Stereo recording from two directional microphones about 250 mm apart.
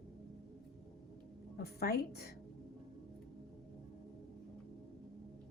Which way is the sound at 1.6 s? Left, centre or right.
Left.